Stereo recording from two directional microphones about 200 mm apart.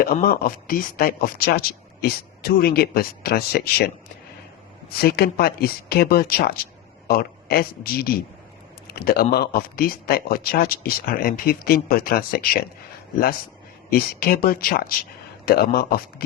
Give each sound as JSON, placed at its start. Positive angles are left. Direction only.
{"t": 0.0, "sound": "a man's voice", "side_deg": 50}
{"t": 13.9, "sound": "speech", "side_deg": 50}